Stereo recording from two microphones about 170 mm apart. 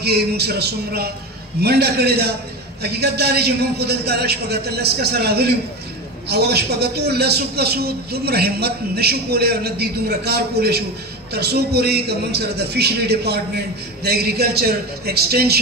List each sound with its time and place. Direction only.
0.0 s a man's voice: 70° right (ahead or behind)